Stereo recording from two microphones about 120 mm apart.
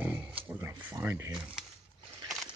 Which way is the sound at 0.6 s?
20° right (ahead or behind).